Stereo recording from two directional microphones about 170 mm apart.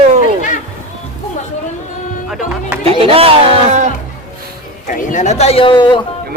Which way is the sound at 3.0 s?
35° right (ahead or behind).